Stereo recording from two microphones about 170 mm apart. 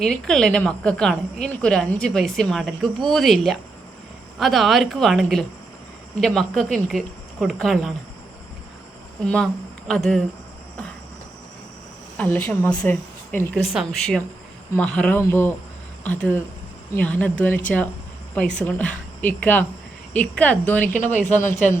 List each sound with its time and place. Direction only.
0.0 s speech: 5° left (ahead or behind)
9.2 s speech: 5° left (ahead or behind)
12.1 s speech: 10° left (ahead or behind)
13.7 s speech: centre (ahead or behind)
20.9 s speech: 45° left (ahead or behind)